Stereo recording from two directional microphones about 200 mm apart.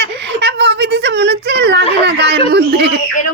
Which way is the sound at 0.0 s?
55° right (ahead or behind).